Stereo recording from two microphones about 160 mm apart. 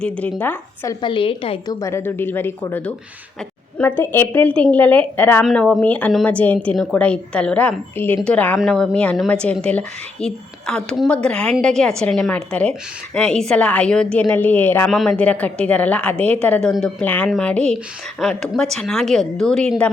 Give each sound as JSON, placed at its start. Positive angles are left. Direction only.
{"t": 0.0, "sound": "a woman's voice", "side_deg": 10}
{"t": 1.0, "sound": "a woman's voice", "side_deg": 30}
{"t": 1.8, "sound": "a woman's voice", "side_deg": 15}